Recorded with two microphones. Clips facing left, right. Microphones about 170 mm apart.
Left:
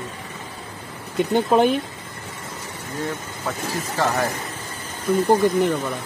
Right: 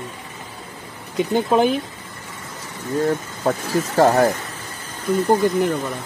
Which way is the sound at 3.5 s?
45° right (ahead or behind).